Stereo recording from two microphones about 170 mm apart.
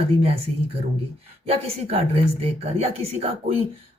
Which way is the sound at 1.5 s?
35° right (ahead or behind).